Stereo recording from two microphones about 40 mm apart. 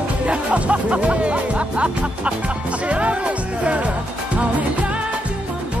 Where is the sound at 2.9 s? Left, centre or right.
Right.